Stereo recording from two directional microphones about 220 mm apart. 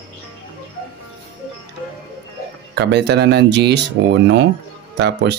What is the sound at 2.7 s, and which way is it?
Speech, 50° right (ahead or behind).